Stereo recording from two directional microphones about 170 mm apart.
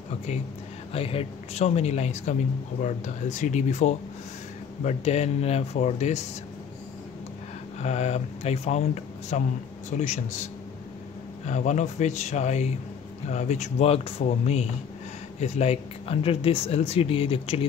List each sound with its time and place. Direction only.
0.9 s speech: 35° left (ahead or behind)
7.8 s speech: 40° left (ahead or behind)
11.4 s speech: 45° left (ahead or behind)